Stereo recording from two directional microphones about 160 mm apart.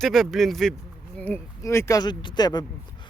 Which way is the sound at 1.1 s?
10° left (ahead or behind).